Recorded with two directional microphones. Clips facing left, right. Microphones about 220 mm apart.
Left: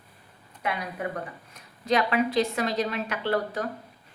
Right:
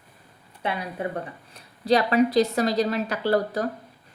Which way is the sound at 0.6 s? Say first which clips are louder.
Right 2 dB; 30° right (ahead or behind).